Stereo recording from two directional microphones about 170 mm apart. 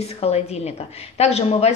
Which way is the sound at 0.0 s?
40° left (ahead or behind).